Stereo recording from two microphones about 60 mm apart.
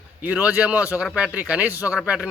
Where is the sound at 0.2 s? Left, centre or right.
Right.